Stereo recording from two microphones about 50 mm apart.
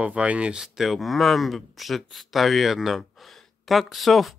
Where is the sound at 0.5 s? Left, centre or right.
Centre.